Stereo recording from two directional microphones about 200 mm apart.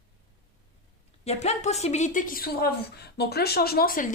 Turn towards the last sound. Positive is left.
turn(degrees=45)  # may be behind; listen again after turning